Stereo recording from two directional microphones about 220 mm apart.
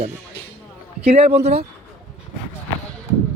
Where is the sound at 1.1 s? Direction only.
30° right (ahead or behind).